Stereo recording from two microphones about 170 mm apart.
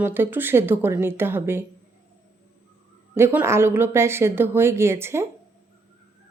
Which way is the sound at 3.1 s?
15° right (ahead or behind).